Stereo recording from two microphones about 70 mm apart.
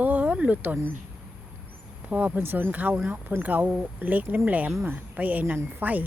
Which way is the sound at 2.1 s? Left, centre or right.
Right.